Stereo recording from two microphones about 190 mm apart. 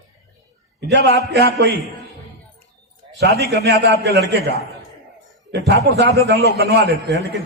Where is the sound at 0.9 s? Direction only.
65° right (ahead or behind).